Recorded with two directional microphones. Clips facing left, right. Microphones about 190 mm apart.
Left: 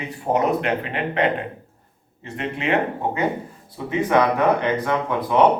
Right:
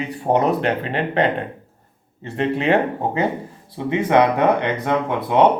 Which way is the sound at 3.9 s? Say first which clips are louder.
Right 2 dB; 20° right (ahead or behind).